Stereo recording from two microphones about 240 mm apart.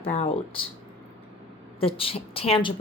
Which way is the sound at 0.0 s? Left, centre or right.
Left.